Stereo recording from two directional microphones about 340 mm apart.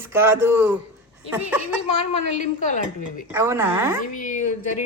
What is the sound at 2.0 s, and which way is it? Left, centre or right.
A woman's voice, left.